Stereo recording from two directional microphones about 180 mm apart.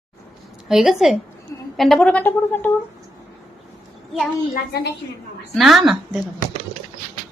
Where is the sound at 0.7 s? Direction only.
Centre (ahead or behind).